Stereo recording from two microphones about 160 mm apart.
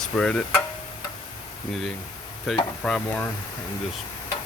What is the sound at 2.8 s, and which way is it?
Speech, 5° left (ahead or behind).